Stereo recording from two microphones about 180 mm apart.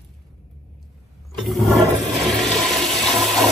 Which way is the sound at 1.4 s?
Centre (ahead or behind).